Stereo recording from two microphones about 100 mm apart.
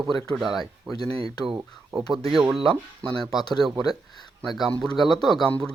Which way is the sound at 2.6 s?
65° right (ahead or behind).